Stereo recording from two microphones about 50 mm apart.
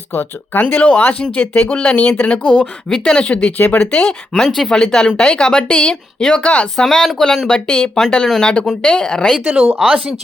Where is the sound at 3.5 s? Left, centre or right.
Left.